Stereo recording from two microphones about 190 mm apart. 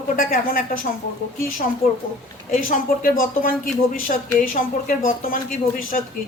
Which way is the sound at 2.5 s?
45° left (ahead or behind).